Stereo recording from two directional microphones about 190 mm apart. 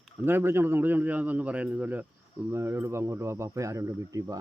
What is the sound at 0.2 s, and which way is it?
Speech, 10° right (ahead or behind).